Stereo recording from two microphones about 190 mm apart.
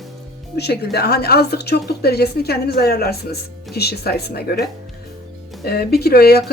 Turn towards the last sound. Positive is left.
turn(degrees=55)  # may be behind; listen again after turning